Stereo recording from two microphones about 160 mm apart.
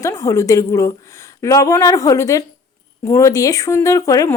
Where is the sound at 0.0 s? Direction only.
20° left (ahead or behind).